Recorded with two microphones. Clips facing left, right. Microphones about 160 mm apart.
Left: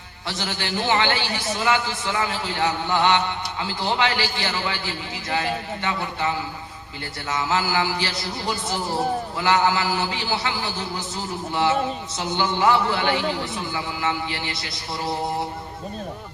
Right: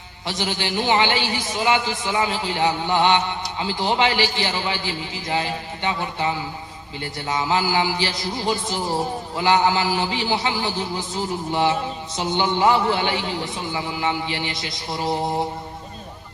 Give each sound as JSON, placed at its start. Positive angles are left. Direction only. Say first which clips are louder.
{"t": 0.3, "sound": "a man's voice", "louder": "right 3 dB", "side_deg": -20}
{"t": 12.1, "sound": "a man's voice", "louder": "right 4 dB", "side_deg": -20}